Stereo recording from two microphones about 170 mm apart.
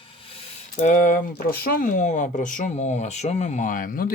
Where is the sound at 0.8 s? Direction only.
50° left (ahead or behind).